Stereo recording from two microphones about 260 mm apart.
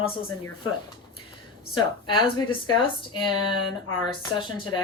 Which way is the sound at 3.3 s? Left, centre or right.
Centre.